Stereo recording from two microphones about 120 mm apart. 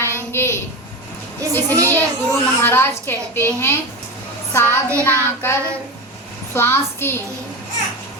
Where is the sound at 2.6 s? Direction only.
20° left (ahead or behind).